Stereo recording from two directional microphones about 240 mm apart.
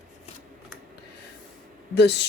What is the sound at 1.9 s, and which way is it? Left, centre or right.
Speech, left.